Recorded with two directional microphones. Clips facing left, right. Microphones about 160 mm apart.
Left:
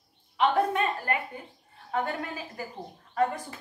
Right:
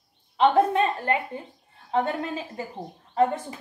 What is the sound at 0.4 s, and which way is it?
A woman's voice, 25° right (ahead or behind).